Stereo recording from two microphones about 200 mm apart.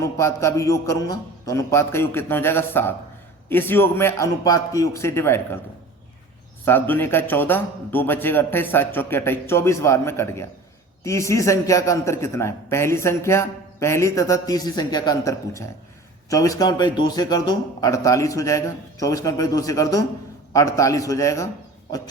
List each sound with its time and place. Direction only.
0.0 s a man's voice: 15° left (ahead or behind)
6.7 s a man's voice: 10° left (ahead or behind)